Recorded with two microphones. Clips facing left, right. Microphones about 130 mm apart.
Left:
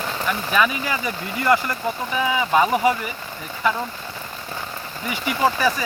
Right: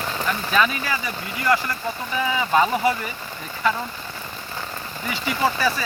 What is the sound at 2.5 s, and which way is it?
Speech, 15° left (ahead or behind).